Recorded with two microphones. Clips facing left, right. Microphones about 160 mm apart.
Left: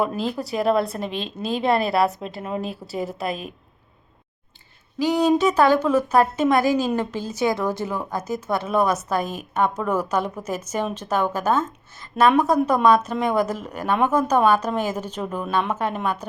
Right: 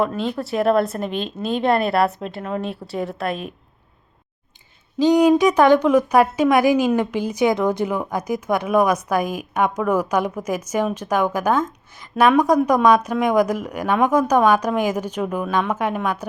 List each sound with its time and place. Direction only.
0.0 s a woman's voice: 5° left (ahead or behind)
4.9 s a woman's voice: 20° right (ahead or behind)